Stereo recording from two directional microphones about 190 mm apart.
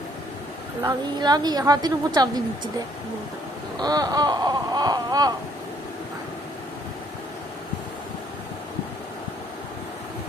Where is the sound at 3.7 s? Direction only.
20° right (ahead or behind).